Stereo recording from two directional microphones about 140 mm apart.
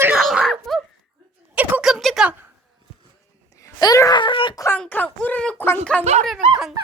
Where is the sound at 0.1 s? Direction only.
5° right (ahead or behind).